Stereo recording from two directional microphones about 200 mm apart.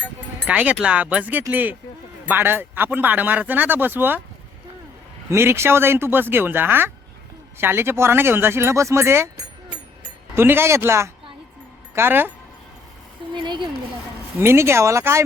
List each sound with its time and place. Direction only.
0.4 s speech: 5° right (ahead or behind)
5.3 s speech: 15° right (ahead or behind)
10.3 s speech: 10° right (ahead or behind)
13.3 s speech: 25° right (ahead or behind)
14.3 s speech: 15° right (ahead or behind)